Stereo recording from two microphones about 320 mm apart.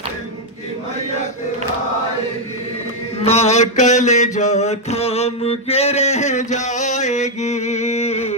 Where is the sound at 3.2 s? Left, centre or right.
Centre.